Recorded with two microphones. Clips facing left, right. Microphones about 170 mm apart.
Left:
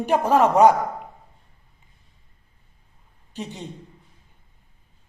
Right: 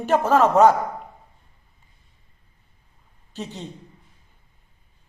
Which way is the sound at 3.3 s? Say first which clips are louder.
Even; 15° left (ahead or behind).